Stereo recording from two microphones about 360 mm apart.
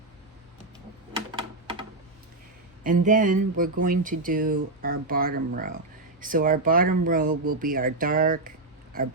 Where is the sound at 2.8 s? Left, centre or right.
Right.